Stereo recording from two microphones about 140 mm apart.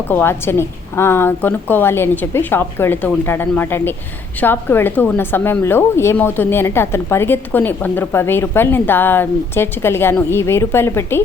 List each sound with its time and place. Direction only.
0.1 s a woman's voice: 15° left (ahead or behind)